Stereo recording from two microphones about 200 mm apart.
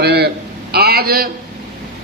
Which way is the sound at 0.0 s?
55° right (ahead or behind).